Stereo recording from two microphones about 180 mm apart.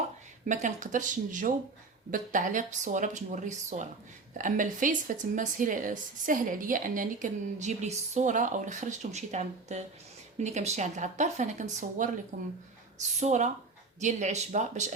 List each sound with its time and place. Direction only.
0.4 s speech: 45° right (ahead or behind)